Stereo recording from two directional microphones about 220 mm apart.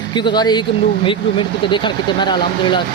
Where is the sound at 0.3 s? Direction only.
20° left (ahead or behind).